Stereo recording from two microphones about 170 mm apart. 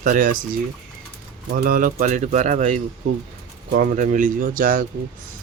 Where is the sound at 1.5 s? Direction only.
60° right (ahead or behind).